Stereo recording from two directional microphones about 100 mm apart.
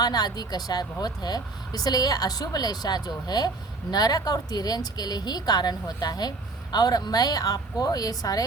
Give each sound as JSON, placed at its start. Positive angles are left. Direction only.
{"t": 0.0, "sound": "speech", "side_deg": 40}